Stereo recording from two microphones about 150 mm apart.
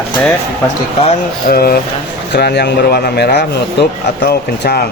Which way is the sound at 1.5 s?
90° left.